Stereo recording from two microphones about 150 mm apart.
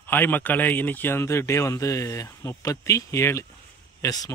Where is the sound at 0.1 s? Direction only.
15° left (ahead or behind).